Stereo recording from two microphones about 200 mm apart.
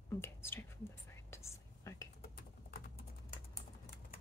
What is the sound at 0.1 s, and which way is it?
Speech, 10° left (ahead or behind).